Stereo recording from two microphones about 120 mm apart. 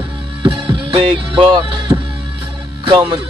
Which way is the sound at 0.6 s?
45° right (ahead or behind).